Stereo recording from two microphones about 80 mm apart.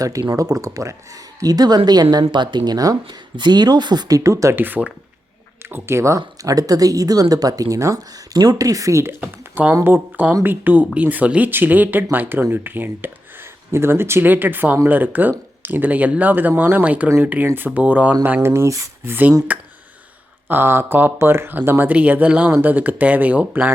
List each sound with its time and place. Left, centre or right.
0.0 s speech: right
4.2 s speech: right
4.5 s speech: right
9.2 s speech: right
18.4 s speech: right
19.5 s speech: centre
20.5 s speech: right